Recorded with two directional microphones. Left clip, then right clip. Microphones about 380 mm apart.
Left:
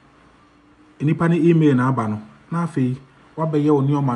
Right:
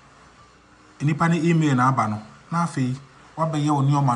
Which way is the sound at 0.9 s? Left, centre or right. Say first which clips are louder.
Left 3 dB; centre.